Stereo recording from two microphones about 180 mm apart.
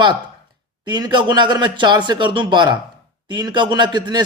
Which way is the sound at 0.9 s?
25° right (ahead or behind).